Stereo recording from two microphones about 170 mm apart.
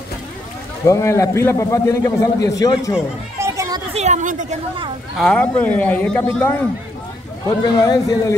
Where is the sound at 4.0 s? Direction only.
45° right (ahead or behind).